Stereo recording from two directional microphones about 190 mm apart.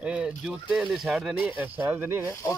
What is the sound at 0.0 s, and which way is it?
Speech, 5° right (ahead or behind).